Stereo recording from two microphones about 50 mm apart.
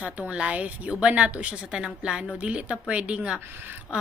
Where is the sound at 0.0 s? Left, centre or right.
Right.